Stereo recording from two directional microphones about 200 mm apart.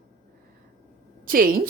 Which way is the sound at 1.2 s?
45° right (ahead or behind).